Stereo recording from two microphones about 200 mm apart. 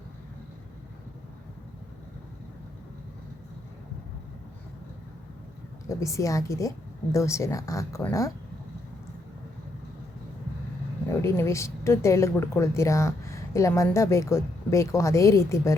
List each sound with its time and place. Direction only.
5.9 s a woman's voice: 15° left (ahead or behind)
11.2 s a woman's voice: 15° left (ahead or behind)